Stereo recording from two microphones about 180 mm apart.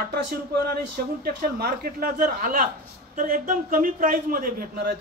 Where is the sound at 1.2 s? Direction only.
55° right (ahead or behind).